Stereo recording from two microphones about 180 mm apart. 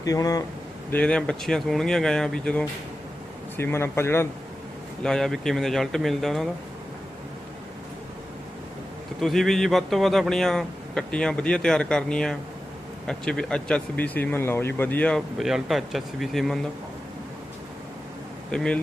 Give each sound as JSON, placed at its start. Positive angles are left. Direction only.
{"t": 0.0, "sound": "speech", "side_deg": 20}
{"t": 0.9, "sound": "a man's voice", "side_deg": 5}
{"t": 5.0, "sound": "speech", "side_deg": 0}
{"t": 9.2, "sound": "speech", "side_deg": 0}
{"t": 18.5, "sound": "speech", "side_deg": 5}